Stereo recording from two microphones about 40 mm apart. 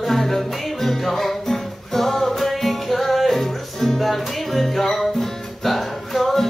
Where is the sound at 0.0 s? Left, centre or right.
Centre.